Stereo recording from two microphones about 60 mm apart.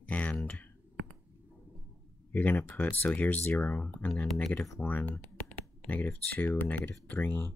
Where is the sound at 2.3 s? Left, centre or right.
Left.